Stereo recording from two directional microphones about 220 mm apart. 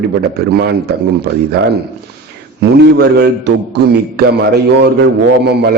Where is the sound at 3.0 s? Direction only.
50° right (ahead or behind).